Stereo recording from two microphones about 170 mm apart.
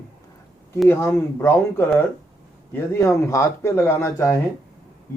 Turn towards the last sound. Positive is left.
turn(degrees=15)  # may be behind; listen again after turning